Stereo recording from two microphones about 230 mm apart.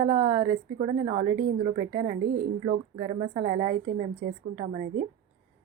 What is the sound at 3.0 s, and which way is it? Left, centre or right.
A woman's voice, centre.